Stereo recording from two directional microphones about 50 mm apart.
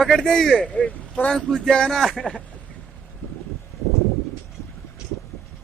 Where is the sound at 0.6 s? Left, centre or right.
Left.